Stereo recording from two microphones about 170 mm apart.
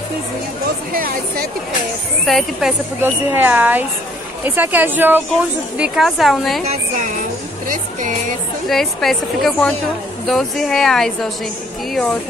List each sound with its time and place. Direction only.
0.9 s speech: 55° right (ahead or behind)
2.2 s a woman's voice: centre (ahead or behind)
3.0 s a woman's voice: 10° right (ahead or behind)
8.6 s a woman's voice: centre (ahead or behind)